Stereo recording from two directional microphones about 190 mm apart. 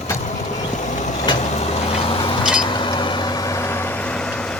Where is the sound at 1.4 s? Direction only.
35° left (ahead or behind).